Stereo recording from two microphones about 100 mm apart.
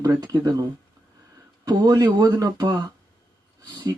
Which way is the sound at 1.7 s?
45° right (ahead or behind).